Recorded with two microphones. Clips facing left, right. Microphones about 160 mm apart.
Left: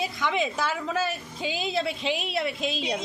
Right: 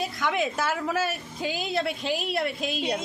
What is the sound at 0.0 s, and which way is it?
A woman's voice, centre (ahead or behind).